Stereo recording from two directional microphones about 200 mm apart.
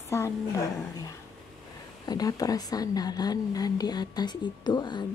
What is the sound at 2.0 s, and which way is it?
A woman's voice, 20° left (ahead or behind).